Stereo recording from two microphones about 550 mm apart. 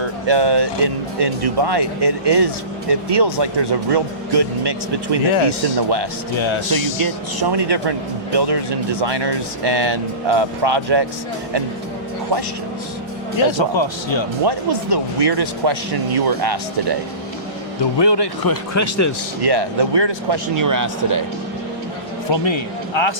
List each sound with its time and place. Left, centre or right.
0.3 s speech: right
13.4 s speech: left
14.4 s speech: right
17.9 s speech: left
19.4 s speech: right
20.6 s speech: right
22.3 s a man's voice: left